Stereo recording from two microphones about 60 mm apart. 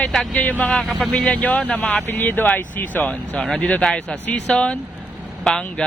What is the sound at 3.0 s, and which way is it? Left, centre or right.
Speech, centre.